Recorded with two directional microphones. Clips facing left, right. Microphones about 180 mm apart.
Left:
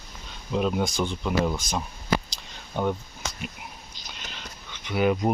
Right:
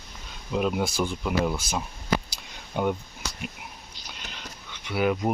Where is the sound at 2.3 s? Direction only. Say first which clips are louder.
Right 1 dB; 10° right (ahead or behind).